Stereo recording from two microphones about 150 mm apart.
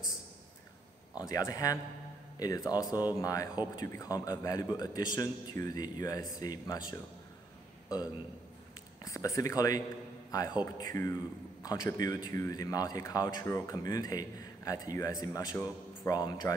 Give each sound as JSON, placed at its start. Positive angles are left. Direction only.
{"t": 1.1, "sound": "speech", "side_deg": 25}
{"t": 9.0, "sound": "speech", "side_deg": 20}